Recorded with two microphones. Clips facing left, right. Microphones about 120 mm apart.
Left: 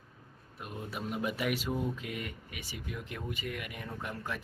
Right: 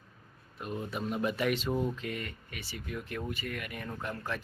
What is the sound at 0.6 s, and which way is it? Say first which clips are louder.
Speech: right 4 dB; 5° left (ahead or behind).